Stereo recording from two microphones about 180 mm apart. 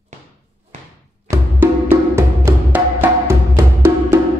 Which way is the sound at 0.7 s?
40° right (ahead or behind).